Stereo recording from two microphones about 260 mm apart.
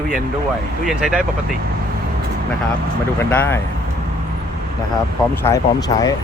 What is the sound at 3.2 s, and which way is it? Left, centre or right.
Speech, centre.